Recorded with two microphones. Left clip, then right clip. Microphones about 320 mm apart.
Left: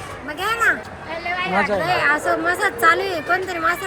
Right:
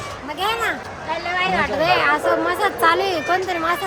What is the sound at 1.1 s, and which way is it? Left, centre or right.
Speech, right.